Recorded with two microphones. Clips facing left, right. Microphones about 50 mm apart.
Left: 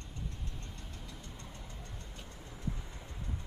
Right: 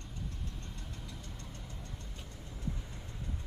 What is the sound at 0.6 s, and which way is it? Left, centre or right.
Vehicle, centre.